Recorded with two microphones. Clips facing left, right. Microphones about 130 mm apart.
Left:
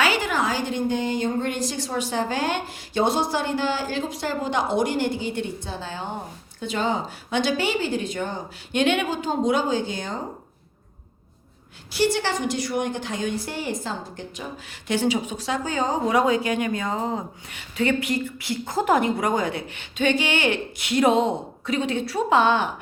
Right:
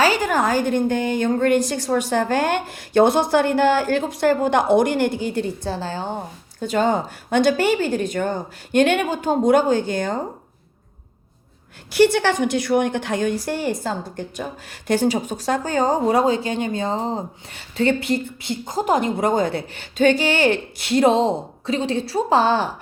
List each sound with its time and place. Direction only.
0.0 s a woman's voice: 40° right (ahead or behind)
11.9 s a woman's voice: 55° right (ahead or behind)
13.3 s a woman's voice: 45° right (ahead or behind)